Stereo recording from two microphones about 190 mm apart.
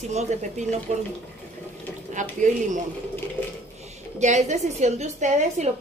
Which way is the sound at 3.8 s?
35° right (ahead or behind).